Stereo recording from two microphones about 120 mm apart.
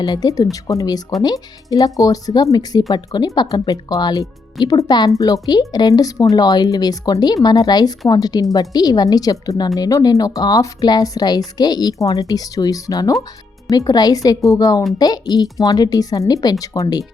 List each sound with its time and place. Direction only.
0.0 s a woman's voice: 30° left (ahead or behind)